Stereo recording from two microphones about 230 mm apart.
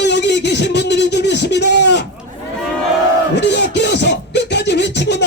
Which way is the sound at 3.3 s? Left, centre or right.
Left.